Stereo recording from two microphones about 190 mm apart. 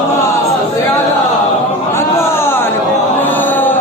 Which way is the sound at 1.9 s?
15° left (ahead or behind).